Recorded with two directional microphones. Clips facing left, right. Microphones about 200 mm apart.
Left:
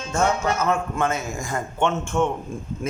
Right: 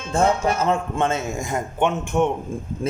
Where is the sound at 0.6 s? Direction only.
30° right (ahead or behind).